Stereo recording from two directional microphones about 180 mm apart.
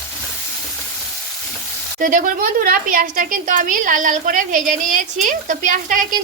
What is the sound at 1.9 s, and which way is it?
A woman's voice, 50° right (ahead or behind).